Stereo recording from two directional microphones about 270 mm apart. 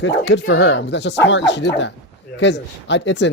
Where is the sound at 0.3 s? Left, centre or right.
Left.